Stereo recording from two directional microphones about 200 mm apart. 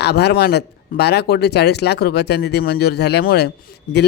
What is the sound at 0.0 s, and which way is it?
Speech, 55° left (ahead or behind).